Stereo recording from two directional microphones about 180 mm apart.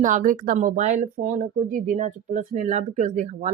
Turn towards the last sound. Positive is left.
turn(degrees=-40)  # may be behind; listen again after turning